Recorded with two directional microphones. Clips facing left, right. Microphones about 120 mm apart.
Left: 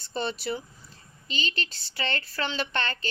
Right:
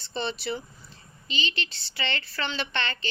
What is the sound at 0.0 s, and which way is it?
A woman's voice, 45° left (ahead or behind).